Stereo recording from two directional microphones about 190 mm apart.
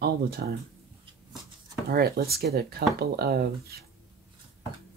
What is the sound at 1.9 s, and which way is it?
Speech, 55° right (ahead or behind).